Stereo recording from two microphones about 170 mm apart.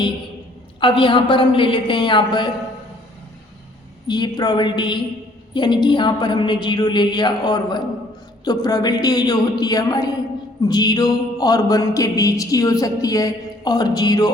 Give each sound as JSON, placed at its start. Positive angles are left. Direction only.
{"t": 0.8, "sound": "speech", "side_deg": 30}
{"t": 4.0, "sound": "speech", "side_deg": 25}